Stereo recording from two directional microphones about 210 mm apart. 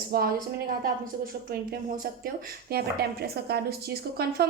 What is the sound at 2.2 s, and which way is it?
A woman's voice, 45° right (ahead or behind).